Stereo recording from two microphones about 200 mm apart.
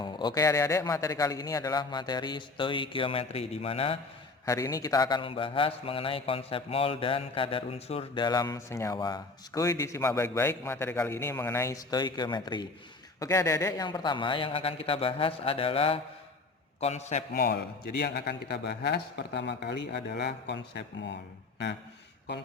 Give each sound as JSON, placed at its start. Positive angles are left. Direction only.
{"t": 0.0, "sound": "a man's voice", "side_deg": 20}
{"t": 4.4, "sound": "a man's voice", "side_deg": 15}
{"t": 17.3, "sound": "a man's voice", "side_deg": 50}